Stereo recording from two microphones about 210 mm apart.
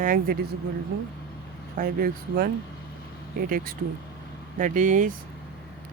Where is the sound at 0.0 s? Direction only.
40° right (ahead or behind).